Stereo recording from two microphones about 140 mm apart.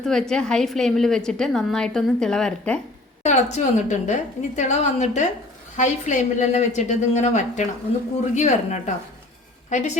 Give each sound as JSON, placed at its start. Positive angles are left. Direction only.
{"t": 0.0, "sound": "a woman's voice", "side_deg": 5}
{"t": 3.2, "sound": "a woman's voice", "side_deg": 55}